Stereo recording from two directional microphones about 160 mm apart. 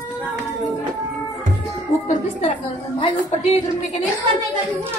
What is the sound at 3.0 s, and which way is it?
Speech, 35° left (ahead or behind).